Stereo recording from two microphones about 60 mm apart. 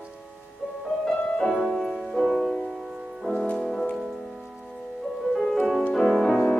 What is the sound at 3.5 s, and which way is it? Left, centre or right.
Music, centre.